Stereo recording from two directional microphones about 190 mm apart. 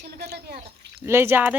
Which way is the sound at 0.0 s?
55° right (ahead or behind).